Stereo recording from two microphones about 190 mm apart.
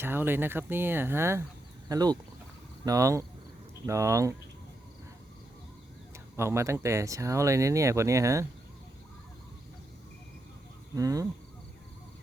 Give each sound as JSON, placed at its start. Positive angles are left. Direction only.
{"t": 0.0, "sound": "speech", "side_deg": -10}
{"t": 6.3, "sound": "speech", "side_deg": -15}
{"t": 10.9, "sound": "speech", "side_deg": -20}